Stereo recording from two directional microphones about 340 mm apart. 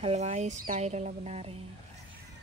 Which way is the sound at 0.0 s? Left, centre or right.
Centre.